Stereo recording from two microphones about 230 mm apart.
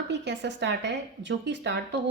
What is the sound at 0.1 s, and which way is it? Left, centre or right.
Speech, right.